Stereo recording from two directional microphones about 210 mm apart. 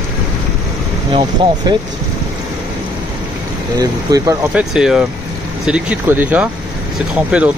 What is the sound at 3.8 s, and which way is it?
Speech, 15° right (ahead or behind).